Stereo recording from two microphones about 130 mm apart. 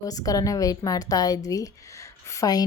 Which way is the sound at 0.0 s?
30° left (ahead or behind).